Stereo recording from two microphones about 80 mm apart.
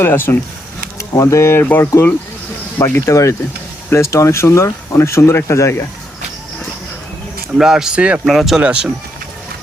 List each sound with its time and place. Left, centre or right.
0.0 s speech: left
0.9 s speech: left
7.6 s speech: centre
8.3 s speech: centre